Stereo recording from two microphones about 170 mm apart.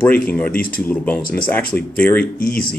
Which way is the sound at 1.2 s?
60° left (ahead or behind).